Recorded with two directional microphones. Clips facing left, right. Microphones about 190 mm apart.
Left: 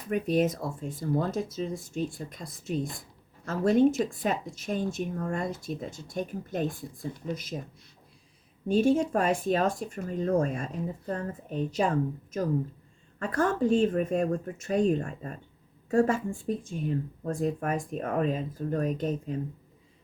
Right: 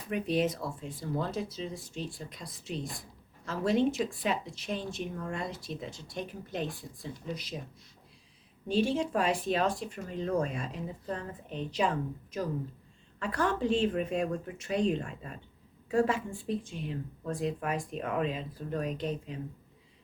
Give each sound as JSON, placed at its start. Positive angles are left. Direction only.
{"t": 0.1, "sound": "speech", "side_deg": 45}
{"t": 8.6, "sound": "speech", "side_deg": 45}